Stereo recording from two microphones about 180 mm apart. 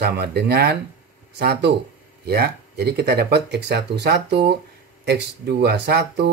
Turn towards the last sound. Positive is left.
turn(degrees=-65)  # may be behind; listen again after turning